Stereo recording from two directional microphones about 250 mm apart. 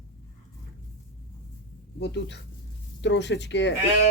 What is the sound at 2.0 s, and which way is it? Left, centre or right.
Speech, left.